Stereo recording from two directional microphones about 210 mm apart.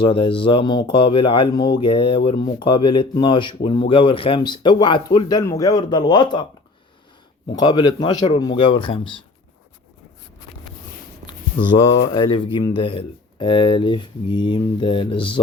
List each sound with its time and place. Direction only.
0.0 s speech: 25° left (ahead or behind)
7.5 s speech: 20° left (ahead or behind)
12.1 s speech: 20° left (ahead or behind)